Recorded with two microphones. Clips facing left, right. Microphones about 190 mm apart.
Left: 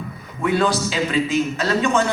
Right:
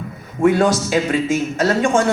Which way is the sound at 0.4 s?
45° right (ahead or behind).